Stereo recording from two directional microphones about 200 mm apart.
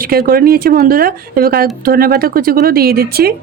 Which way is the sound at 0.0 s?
45° right (ahead or behind).